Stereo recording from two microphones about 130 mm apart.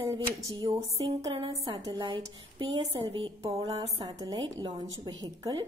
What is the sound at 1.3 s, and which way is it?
A woman's voice, 40° right (ahead or behind).